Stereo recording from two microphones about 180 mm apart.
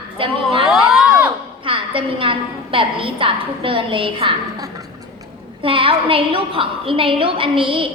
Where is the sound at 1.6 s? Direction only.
30° right (ahead or behind).